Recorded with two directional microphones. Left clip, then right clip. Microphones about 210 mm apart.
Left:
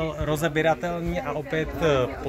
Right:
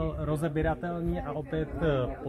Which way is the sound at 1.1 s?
50° left (ahead or behind).